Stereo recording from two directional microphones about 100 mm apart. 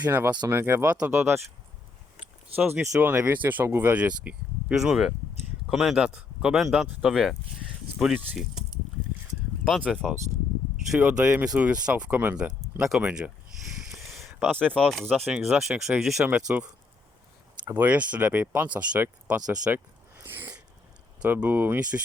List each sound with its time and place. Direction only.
0.0 s speech: 20° right (ahead or behind)
2.6 s speech: 15° right (ahead or behind)
9.6 s speech: 5° left (ahead or behind)
11.0 s speech: 10° right (ahead or behind)
13.9 s a sound: centre (ahead or behind)
14.3 s speech: 15° right (ahead or behind)
14.7 s speech: 5° left (ahead or behind); by 16.6 s 10° right (ahead or behind)
17.7 s speech: 20° right (ahead or behind)
19.7 s a sound: 20° right (ahead or behind)
21.2 s speech: 15° right (ahead or behind)